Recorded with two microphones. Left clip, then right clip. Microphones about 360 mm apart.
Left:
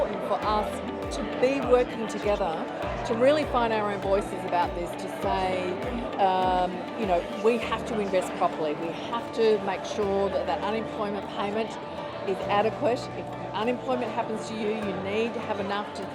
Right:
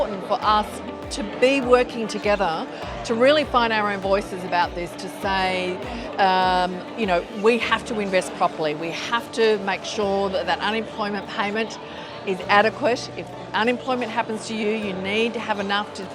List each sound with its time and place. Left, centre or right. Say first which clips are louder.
0.3 s music: right 8 dB; right
1.4 s speech: right 5 dB; right
5.3 s music: right 5 dB; right
6.1 s speech: right 5 dB; right